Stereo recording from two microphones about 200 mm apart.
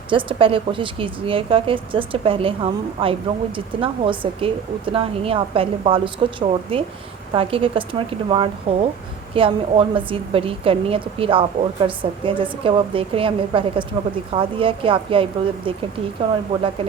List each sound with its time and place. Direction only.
0.1 s a woman's voice: 25° right (ahead or behind)